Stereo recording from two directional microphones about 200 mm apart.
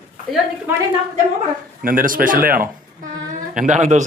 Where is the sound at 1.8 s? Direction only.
45° right (ahead or behind).